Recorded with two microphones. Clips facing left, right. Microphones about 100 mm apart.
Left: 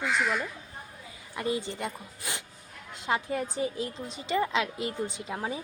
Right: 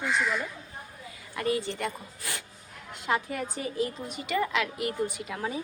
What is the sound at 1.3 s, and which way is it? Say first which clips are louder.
A woman's voice: right 2 dB; 20° left (ahead or behind).